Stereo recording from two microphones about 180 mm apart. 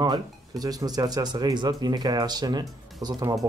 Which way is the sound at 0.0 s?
20° right (ahead or behind).